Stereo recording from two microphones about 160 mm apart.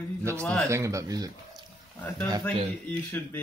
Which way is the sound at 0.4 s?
5° left (ahead or behind).